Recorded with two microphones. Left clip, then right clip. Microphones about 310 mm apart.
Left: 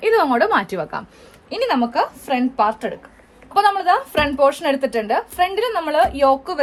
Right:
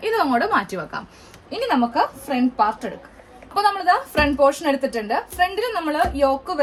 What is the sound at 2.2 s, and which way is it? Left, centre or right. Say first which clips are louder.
A woman's voice: left 2 dB; centre.